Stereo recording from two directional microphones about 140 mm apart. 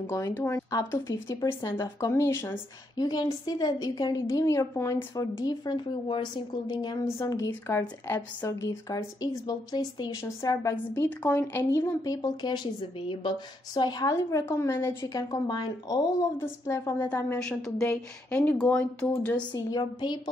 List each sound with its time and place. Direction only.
0.0 s a woman's voice: 15° left (ahead or behind); by 7.2 s 30° left (ahead or behind)
7.2 s speech: 20° left (ahead or behind)
11.1 s speech: 10° left (ahead or behind)
15.3 s a woman's voice: 30° left (ahead or behind); by 19.4 s 10° left (ahead or behind)
19.5 s a woman's voice: 30° left (ahead or behind)